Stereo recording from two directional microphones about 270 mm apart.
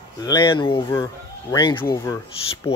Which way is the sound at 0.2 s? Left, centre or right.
Centre.